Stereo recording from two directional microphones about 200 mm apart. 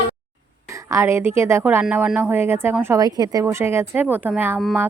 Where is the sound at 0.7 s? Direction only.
15° right (ahead or behind).